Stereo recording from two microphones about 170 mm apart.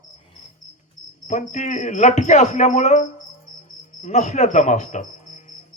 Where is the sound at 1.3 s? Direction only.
45° left (ahead or behind).